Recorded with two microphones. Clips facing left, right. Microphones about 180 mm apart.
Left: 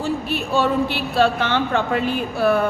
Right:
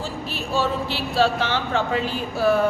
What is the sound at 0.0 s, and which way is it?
Speech, 60° left (ahead or behind).